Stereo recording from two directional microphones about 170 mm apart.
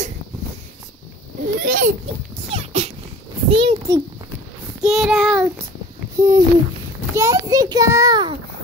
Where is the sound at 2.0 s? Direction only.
35° right (ahead or behind).